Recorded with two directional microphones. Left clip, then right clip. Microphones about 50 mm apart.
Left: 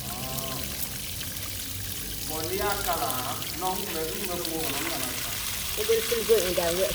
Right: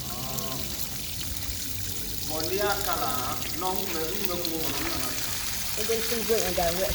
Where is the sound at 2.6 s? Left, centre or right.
Left.